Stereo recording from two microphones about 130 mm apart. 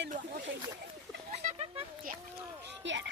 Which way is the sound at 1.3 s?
55° right (ahead or behind).